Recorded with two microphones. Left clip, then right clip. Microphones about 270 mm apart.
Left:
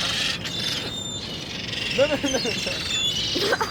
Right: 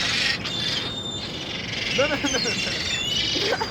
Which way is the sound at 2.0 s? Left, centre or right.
Left.